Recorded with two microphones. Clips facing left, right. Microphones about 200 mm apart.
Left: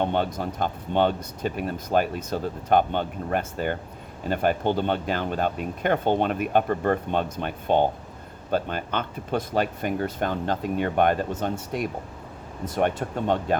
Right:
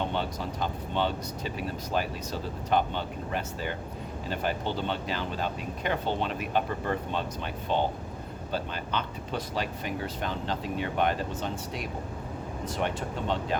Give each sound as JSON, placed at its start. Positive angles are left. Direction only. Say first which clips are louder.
{"t": 0.0, "sound": "speech", "louder": "left 6 dB", "side_deg": 55}